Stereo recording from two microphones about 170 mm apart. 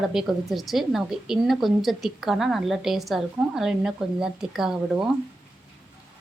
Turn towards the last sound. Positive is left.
turn(degrees=-5)  # may be behind; listen again after turning